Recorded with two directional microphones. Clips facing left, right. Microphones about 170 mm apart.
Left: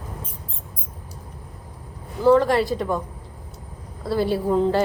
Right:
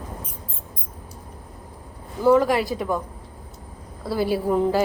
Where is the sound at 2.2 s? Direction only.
5° right (ahead or behind).